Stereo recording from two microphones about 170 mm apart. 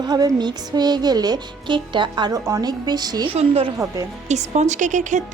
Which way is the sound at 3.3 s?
35° right (ahead or behind).